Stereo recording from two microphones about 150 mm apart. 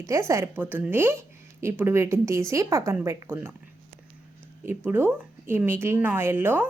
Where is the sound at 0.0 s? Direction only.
20° right (ahead or behind).